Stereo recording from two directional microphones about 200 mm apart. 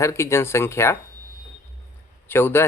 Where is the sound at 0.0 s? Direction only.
15° left (ahead or behind).